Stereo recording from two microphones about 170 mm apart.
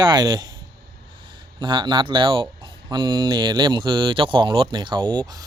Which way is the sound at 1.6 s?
25° right (ahead or behind).